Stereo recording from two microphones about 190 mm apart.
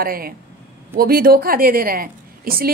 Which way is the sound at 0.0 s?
50° right (ahead or behind).